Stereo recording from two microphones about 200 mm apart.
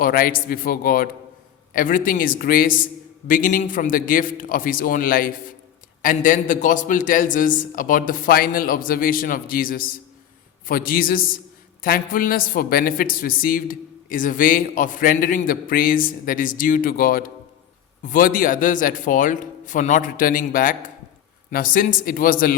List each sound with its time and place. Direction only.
0.0 s a man's voice: 45° left (ahead or behind)